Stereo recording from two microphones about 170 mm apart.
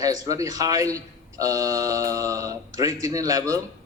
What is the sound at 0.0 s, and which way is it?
Speech, 20° right (ahead or behind).